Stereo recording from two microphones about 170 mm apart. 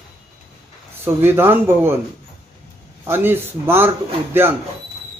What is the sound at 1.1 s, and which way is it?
Speech, 10° right (ahead or behind).